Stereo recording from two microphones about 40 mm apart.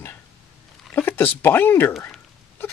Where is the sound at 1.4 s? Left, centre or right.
Left.